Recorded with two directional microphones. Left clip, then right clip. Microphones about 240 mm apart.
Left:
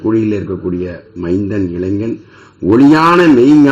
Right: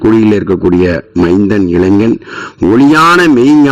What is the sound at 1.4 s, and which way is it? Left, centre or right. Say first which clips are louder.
A man's voice: right 8 dB; right.